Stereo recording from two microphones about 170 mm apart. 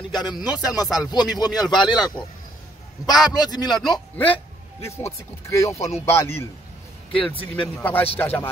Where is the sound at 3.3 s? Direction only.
25° left (ahead or behind).